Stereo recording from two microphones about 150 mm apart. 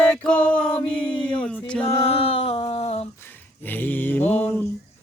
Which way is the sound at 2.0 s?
40° left (ahead or behind).